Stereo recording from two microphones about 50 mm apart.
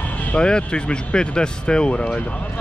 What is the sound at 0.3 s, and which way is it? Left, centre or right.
Speech, centre.